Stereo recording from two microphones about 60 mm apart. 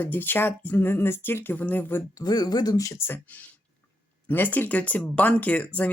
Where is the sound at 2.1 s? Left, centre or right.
Left.